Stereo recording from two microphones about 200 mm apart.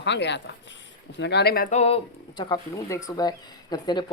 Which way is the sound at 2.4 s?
20° left (ahead or behind).